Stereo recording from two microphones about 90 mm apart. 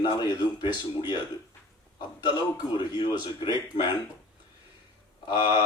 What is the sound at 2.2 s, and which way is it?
A man's voice, 50° left (ahead or behind).